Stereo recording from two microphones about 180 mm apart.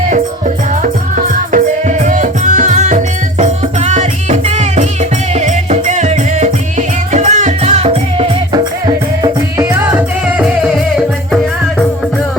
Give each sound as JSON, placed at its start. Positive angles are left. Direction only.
{"t": 0.1, "sound": "music", "side_deg": -45}
{"t": 9.2, "sound": "music", "side_deg": -20}